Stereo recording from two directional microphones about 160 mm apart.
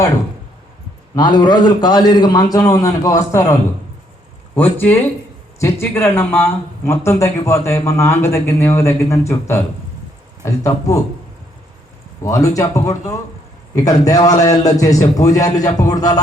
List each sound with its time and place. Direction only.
1.1 s a man's voice: 25° left (ahead or behind)
4.8 s a man's voice: 10° left (ahead or behind)
12.2 s a man's voice: 20° left (ahead or behind)